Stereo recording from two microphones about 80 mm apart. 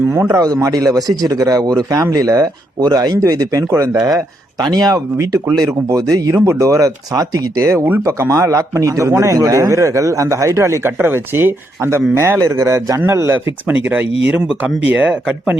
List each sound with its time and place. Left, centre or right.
0.0 s a man's voice: right
0.3 s a man's voice: right
4.5 s a man's voice: right; by 15.5 s centre